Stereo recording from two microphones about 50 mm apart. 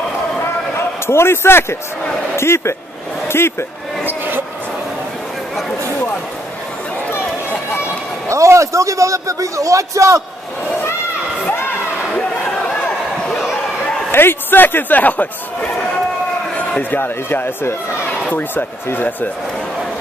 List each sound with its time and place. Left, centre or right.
1.0 s speech: left
3.3 s a sound: left
4.0 s a sound: right
8.3 s a man's voice: right
12.1 s chatter: left
14.1 s a man's voice: left
16.9 s speech: left